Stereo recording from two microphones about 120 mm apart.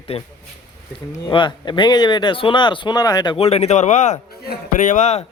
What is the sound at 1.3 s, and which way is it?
Speech, 40° left (ahead or behind).